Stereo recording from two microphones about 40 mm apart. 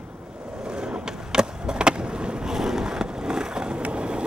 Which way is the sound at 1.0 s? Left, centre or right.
Centre.